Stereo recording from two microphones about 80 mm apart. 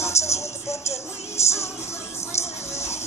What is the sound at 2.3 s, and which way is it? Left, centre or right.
Music, left.